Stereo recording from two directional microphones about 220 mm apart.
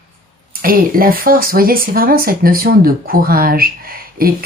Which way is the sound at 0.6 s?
40° right (ahead or behind).